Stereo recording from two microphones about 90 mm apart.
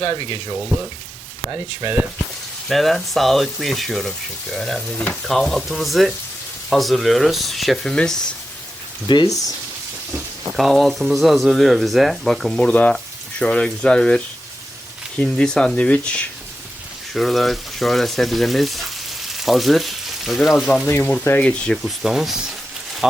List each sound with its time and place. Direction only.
0.0 s speech: 80° left
1.5 s speech: 30° right (ahead or behind)
2.6 s speech: centre (ahead or behind)
9.1 s speech: 60° left (ahead or behind)
10.5 s speech: centre (ahead or behind)
15.2 s speech: 10° left (ahead or behind)
17.2 s speech: centre (ahead or behind)
19.4 s frying: centre (ahead or behind)
20.8 s speech: 20° left (ahead or behind)
21.8 s speech: 5° right (ahead or behind)